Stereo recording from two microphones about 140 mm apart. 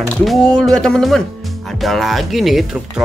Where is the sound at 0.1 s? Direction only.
Centre (ahead or behind).